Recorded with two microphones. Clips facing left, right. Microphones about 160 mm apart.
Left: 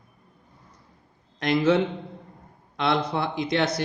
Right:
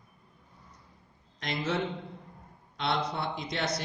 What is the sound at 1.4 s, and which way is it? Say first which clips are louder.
Speech: left 12 dB; 70° left (ahead or behind).